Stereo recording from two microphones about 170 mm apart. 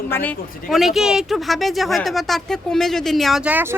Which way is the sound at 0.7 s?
Centre (ahead or behind).